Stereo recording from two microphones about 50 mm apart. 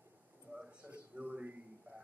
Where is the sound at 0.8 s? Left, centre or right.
Right.